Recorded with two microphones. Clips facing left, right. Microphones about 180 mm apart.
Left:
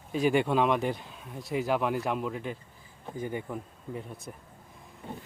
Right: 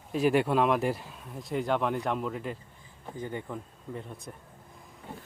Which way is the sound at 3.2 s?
10° left (ahead or behind).